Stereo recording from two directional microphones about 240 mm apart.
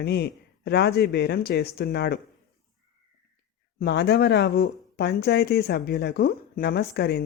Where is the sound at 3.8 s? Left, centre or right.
Left.